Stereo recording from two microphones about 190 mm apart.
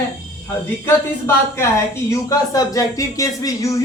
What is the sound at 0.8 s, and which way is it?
Speech, 15° left (ahead or behind).